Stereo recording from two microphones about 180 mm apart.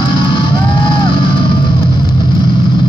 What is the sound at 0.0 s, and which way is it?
Music, 25° left (ahead or behind).